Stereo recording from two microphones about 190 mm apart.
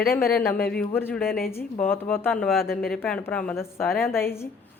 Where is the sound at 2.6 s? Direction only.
50° left (ahead or behind).